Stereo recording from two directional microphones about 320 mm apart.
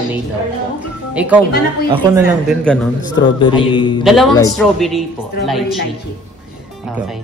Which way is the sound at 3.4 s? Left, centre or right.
Centre.